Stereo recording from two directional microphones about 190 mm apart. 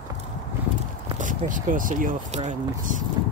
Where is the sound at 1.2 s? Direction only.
45° right (ahead or behind).